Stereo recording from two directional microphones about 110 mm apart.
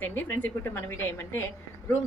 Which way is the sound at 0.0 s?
20° left (ahead or behind).